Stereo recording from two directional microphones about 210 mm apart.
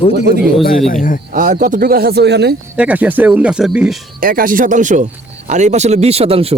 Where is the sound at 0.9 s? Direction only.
40° left (ahead or behind).